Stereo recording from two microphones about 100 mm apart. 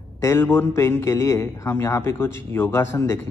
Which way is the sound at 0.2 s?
25° left (ahead or behind).